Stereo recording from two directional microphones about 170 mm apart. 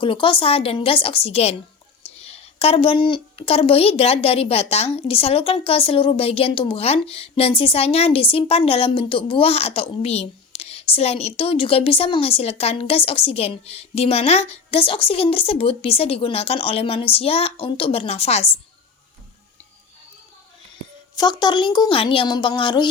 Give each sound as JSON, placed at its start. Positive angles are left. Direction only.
{"t": 0.0, "sound": "a woman's voice", "side_deg": 30}
{"t": 21.2, "sound": "a woman's voice", "side_deg": 25}